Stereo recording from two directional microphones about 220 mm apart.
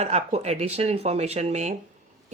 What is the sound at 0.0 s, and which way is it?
Speech, 30° right (ahead or behind).